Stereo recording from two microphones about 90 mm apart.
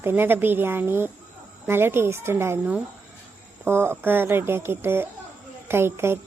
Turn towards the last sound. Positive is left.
turn(degrees=-25)  # may be behind; listen again after turning